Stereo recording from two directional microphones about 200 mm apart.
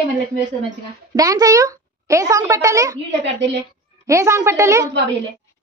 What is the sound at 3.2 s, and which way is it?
Speech, 60° right (ahead or behind).